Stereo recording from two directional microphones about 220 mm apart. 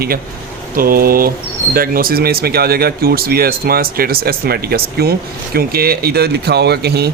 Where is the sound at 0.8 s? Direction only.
40° right (ahead or behind).